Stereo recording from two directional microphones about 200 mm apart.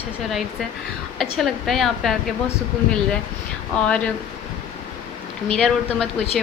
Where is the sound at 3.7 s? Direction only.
5° left (ahead or behind).